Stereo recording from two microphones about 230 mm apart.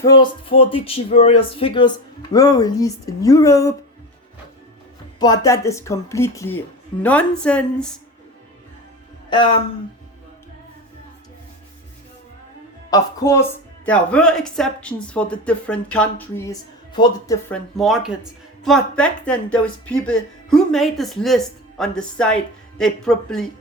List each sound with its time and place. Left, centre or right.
0.0 s speech: centre
5.2 s speech: centre
9.3 s speech: centre
12.9 s speech: centre
17.5 s speech: centre